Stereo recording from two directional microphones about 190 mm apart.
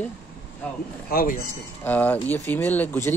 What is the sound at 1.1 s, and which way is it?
Speech, 50° left (ahead or behind).